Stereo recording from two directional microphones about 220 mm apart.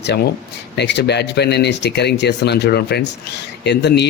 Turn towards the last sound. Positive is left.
turn(degrees=50)  # may be behind; listen again after turning